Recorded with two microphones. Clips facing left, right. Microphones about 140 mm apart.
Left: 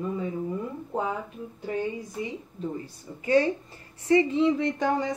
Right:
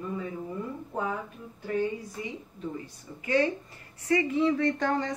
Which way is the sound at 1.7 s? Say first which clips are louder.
Right 1 dB; 20° left (ahead or behind).